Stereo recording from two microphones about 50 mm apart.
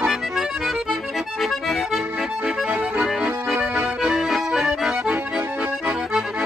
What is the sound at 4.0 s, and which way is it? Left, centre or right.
Accordion, centre.